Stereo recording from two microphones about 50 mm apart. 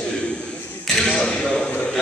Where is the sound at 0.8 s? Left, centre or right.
Centre.